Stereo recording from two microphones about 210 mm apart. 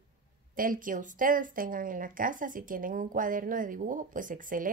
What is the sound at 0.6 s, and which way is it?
A woman's voice, 40° right (ahead or behind).